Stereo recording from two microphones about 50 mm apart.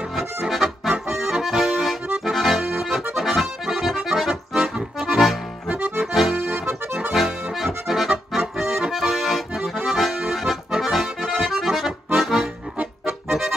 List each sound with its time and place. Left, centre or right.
0.5 s accordion: centre
4.3 s accordion: centre
5.0 s music: centre
5.7 s accordion: right
6.4 s accordion: right
7.1 s accordion: centre